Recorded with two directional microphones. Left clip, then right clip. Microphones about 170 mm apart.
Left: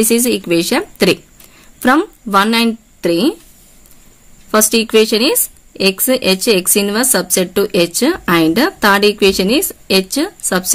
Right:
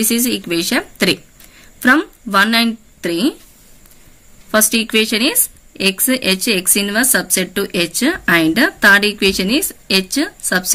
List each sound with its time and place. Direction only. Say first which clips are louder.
0.0 s speech: left 5 dB; 45° left (ahead or behind)
4.5 s speech: left 2 dB; 40° left (ahead or behind)